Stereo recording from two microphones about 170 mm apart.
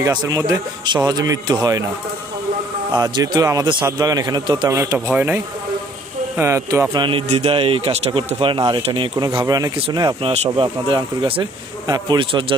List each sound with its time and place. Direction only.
0.0 s speech: 25° right (ahead or behind)
2.9 s speech: 25° right (ahead or behind)
5.1 s speech: 10° right (ahead or behind)
6.9 s speech: 30° right (ahead or behind)